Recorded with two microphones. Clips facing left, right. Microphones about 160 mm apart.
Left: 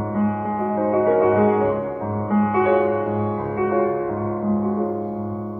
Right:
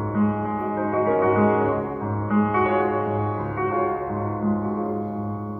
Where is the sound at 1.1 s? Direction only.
25° left (ahead or behind).